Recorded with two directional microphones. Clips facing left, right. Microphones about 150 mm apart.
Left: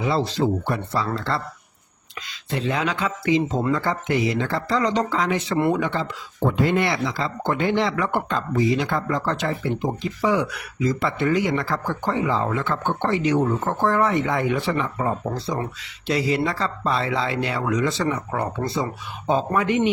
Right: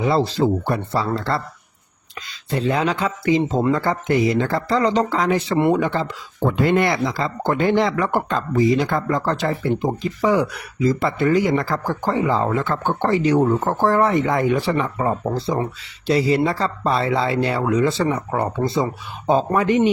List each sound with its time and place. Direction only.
0.6 s speech: 35° right (ahead or behind)
2.5 s speech: 40° right (ahead or behind)
6.6 s speech: 55° right (ahead or behind); by 19.9 s 35° right (ahead or behind)